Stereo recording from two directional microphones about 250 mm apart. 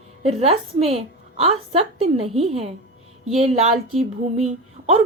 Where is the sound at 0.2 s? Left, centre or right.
Right.